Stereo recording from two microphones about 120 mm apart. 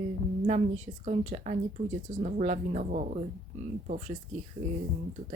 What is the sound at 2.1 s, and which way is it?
Speech, 85° right.